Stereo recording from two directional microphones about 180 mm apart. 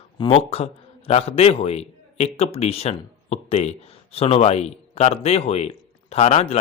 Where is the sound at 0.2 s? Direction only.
30° left (ahead or behind).